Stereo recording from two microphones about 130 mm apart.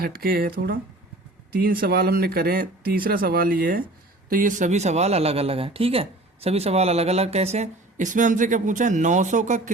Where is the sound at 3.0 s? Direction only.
90° right.